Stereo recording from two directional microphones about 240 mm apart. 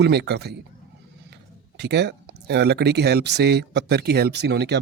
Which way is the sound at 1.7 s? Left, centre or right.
Right.